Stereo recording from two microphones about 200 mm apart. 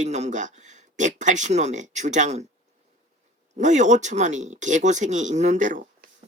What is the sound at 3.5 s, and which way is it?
Speech, 35° right (ahead or behind).